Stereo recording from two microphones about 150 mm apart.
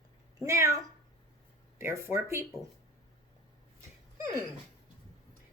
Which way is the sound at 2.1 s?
20° right (ahead or behind).